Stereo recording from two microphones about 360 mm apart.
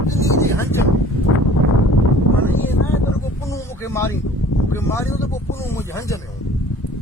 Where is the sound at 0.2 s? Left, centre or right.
Centre.